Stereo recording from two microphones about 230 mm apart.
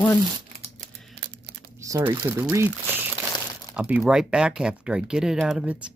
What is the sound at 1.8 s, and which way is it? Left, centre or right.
Speech, centre.